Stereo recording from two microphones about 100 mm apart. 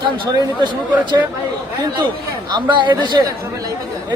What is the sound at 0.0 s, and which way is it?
Speech, 45° right (ahead or behind).